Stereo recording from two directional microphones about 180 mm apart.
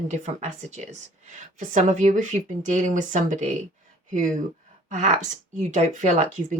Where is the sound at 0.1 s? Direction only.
40° right (ahead or behind).